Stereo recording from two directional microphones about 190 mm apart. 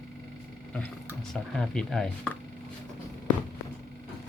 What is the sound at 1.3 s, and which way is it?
Speech, 5° left (ahead or behind).